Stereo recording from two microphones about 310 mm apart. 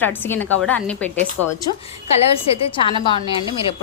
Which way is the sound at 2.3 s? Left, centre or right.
Centre.